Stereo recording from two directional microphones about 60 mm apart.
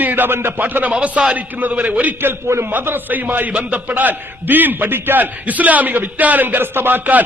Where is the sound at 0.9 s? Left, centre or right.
Centre.